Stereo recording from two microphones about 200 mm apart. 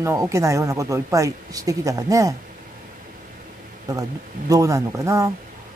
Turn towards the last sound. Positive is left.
turn(degrees=-15)  # may be behind; listen again after turning